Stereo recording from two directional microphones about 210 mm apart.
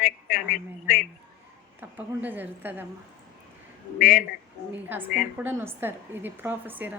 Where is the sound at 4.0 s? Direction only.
40° left (ahead or behind).